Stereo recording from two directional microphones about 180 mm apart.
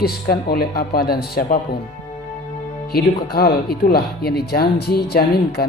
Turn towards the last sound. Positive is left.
turn(degrees=60)  # may be behind; listen again after turning